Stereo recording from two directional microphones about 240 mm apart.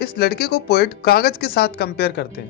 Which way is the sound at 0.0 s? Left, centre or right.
Left.